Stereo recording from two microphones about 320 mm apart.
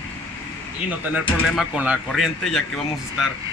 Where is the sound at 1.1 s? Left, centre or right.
Centre.